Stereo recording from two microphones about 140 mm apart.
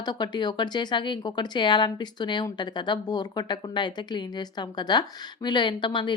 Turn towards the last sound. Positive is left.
turn(degrees=35)  # may be behind; listen again after turning